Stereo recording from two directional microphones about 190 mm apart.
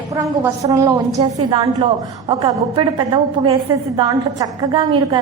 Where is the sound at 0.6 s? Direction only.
20° right (ahead or behind).